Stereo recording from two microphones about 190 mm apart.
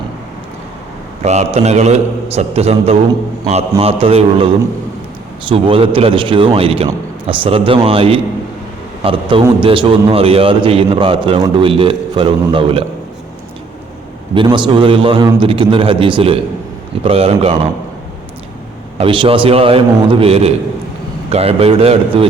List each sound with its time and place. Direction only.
1.2 s a man's voice: 35° right (ahead or behind)
5.5 s a man's voice: 30° right (ahead or behind)
14.3 s a man's voice: 25° right (ahead or behind)
18.9 s a man's voice: 25° right (ahead or behind)